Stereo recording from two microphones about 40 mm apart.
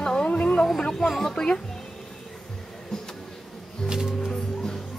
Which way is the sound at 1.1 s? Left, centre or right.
Centre.